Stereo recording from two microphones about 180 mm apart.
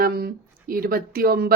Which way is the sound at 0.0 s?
60° right (ahead or behind).